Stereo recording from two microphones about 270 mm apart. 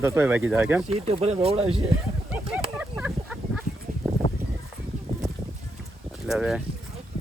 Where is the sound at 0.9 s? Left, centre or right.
Right.